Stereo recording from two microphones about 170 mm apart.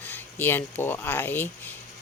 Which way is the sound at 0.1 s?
10° left (ahead or behind).